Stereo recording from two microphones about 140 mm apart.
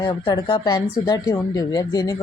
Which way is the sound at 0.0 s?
35° left (ahead or behind).